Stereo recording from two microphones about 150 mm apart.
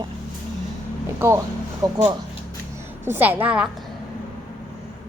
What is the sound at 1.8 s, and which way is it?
Speech, 25° right (ahead or behind).